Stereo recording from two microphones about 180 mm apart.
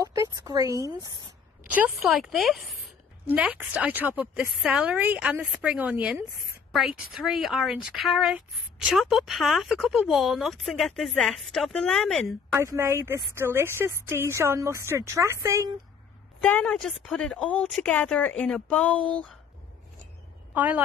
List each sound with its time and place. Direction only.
0.0 s speech: 20° right (ahead or behind)
1.8 s speech: centre (ahead or behind)
12.5 s speech: 15° right (ahead or behind)
16.5 s speech: 5° left (ahead or behind)
20.5 s a woman's voice: 10° right (ahead or behind)